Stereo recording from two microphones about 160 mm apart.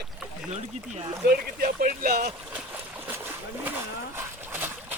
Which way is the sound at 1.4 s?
65° right (ahead or behind).